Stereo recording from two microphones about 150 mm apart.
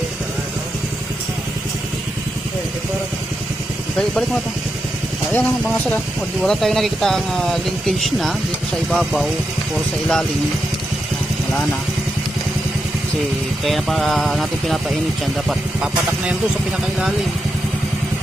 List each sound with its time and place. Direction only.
5.3 s speech: 10° left (ahead or behind)
13.7 s speech: centre (ahead or behind)